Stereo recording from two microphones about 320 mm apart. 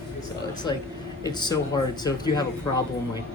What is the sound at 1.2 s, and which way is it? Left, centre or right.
A man's voice, centre.